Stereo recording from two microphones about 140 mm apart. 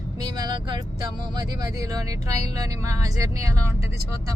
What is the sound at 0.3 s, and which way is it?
Speech, 30° right (ahead or behind).